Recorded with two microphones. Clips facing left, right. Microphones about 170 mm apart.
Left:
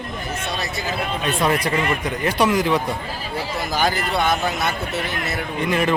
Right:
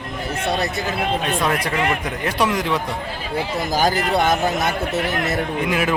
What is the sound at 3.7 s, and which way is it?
A man's voice, 45° right (ahead or behind).